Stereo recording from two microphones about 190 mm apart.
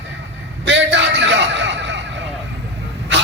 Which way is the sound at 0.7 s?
65° right (ahead or behind).